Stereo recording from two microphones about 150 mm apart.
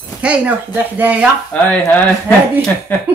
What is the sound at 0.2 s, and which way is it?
Speech, 10° right (ahead or behind).